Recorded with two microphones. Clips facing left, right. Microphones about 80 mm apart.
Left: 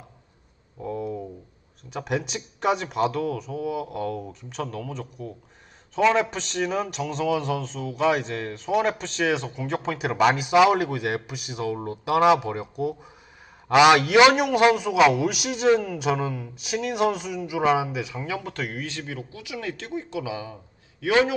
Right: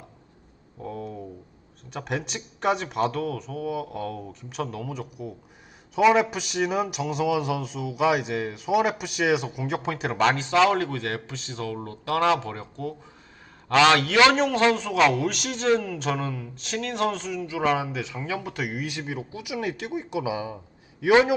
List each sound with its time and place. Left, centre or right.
0.8 s a sound: centre
1.9 s a man's voice: centre
18.4 s speech: centre